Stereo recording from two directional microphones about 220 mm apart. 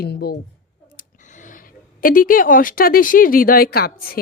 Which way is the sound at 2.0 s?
40° left (ahead or behind).